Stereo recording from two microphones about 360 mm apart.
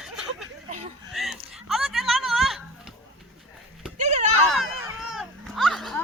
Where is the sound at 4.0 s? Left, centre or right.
Centre.